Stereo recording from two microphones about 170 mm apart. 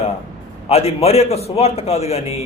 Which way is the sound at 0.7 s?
40° left (ahead or behind).